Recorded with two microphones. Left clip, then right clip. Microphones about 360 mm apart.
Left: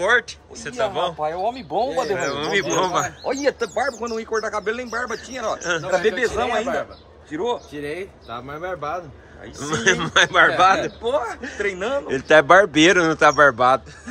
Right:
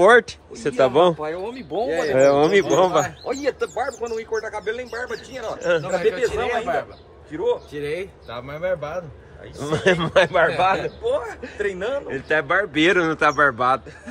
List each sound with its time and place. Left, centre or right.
0.0 s speech: centre
1.2 s speech: centre
2.1 s speech: centre
3.3 s speech: left
5.6 s speech: centre
6.0 s a man's voice: left
7.7 s speech: centre
11.1 s speech: left
12.1 s speech: centre